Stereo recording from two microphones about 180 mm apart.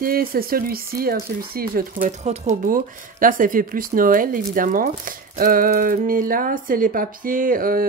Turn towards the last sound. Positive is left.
turn(degrees=-50)  # may be behind; listen again after turning